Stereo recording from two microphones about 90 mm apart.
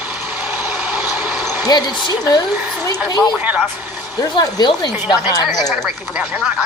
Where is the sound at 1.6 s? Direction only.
50° left (ahead or behind).